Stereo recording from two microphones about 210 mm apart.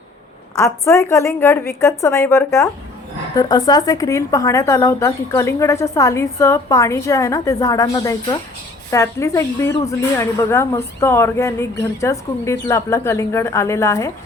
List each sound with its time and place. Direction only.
0.6 s speech: 15° left (ahead or behind)